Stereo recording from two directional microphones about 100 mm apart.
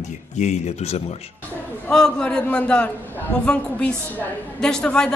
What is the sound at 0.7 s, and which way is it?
Speech, 90° left.